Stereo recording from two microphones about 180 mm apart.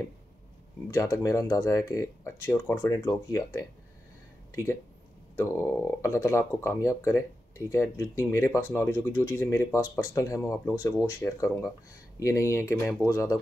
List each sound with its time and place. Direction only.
0.8 s speech: 15° left (ahead or behind)